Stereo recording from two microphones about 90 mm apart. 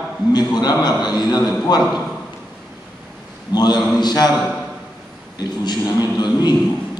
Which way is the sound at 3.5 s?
50° left (ahead or behind).